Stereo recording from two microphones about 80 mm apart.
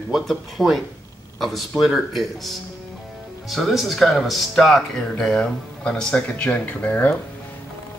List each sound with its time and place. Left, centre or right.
0.1 s speech: centre